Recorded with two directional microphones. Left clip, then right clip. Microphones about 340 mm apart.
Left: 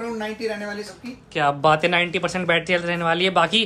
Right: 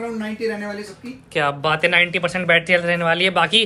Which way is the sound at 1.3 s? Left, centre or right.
Centre.